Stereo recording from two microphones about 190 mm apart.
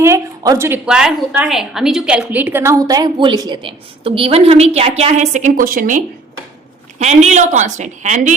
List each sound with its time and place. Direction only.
0.0 s a woman's voice: 15° right (ahead or behind); by 6.0 s 45° right (ahead or behind)
7.0 s a woman's voice: 35° right (ahead or behind)